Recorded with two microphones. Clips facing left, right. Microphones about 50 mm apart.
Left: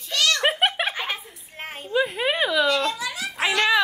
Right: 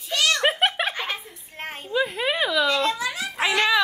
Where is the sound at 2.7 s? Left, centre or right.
Right.